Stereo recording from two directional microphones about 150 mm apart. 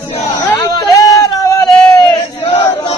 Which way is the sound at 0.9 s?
25° left (ahead or behind).